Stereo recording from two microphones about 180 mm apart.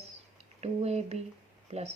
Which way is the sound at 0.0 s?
35° right (ahead or behind).